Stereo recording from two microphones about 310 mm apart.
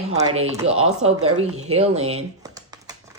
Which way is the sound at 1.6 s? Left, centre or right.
Centre.